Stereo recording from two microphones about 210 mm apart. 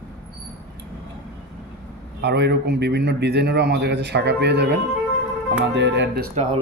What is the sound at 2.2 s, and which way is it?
A man's voice, 50° right (ahead or behind).